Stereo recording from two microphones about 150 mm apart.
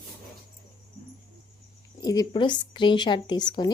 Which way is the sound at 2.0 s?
25° left (ahead or behind).